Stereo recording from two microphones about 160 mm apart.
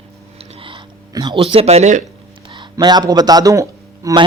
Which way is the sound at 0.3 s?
35° right (ahead or behind).